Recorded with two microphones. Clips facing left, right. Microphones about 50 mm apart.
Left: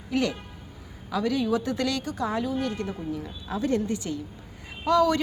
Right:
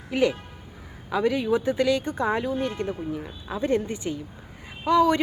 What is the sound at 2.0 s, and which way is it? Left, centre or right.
A woman's voice, right.